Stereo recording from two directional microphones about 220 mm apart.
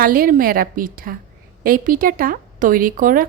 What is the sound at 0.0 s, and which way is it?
Speech, 40° right (ahead or behind).